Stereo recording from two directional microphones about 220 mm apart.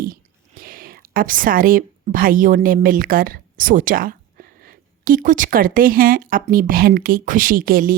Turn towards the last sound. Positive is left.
turn(degrees=-40)  # may be behind; listen again after turning